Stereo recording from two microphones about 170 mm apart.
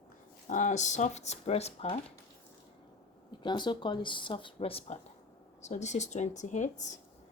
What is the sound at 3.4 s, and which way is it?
Speech, 25° left (ahead or behind).